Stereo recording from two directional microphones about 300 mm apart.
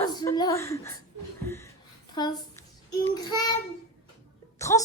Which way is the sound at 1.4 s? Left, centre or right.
Centre.